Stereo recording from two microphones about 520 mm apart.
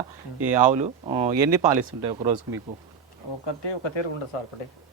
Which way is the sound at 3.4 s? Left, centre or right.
Left.